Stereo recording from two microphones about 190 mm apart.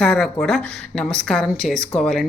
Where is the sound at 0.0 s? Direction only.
5° left (ahead or behind).